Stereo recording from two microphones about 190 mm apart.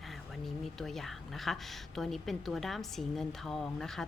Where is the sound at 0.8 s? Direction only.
Centre (ahead or behind).